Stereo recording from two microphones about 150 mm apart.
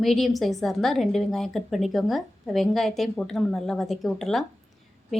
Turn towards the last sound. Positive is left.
turn(degrees=0)  # may be behind; listen again after turning